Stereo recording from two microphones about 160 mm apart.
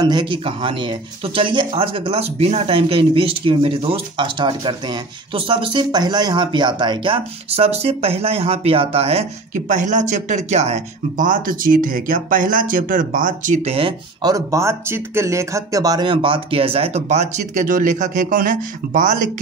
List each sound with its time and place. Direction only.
0.0 s speech: 30° right (ahead or behind)
14.2 s speech: 20° right (ahead or behind); by 19.1 s 55° right (ahead or behind)